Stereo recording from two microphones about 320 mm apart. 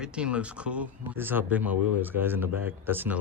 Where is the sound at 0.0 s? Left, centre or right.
Centre.